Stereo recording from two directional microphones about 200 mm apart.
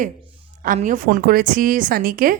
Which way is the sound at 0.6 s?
40° right (ahead or behind).